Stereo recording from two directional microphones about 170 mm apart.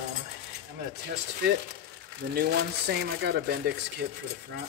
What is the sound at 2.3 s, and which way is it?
Speech, 70° right (ahead or behind).